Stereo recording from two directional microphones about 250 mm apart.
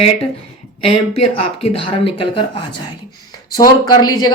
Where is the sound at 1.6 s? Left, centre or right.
Left.